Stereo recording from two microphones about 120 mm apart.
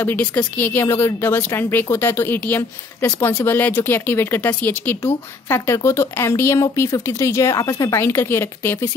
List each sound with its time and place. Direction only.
0.0 s speech: 15° left (ahead or behind)